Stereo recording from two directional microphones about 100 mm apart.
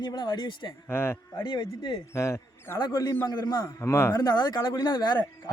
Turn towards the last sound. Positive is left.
turn(degrees=45)  # may be behind; listen again after turning